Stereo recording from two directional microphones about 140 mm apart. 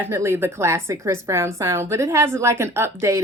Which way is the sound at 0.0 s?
20° right (ahead or behind).